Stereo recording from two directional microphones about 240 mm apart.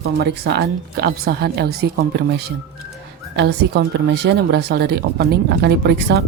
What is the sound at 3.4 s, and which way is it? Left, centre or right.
Speech, right.